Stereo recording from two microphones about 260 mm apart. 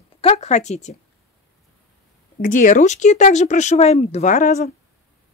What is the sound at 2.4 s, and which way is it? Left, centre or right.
Speech, left.